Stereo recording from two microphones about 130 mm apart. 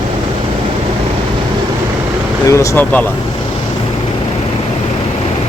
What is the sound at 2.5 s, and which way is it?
Speech, 25° left (ahead or behind).